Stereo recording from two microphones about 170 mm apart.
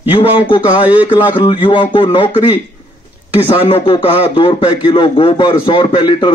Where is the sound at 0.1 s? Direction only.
30° left (ahead or behind).